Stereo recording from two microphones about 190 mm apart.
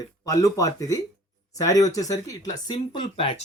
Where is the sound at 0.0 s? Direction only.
20° left (ahead or behind).